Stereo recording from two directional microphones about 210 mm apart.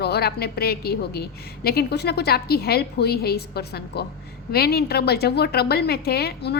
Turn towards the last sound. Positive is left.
turn(degrees=50)  # may be behind; listen again after turning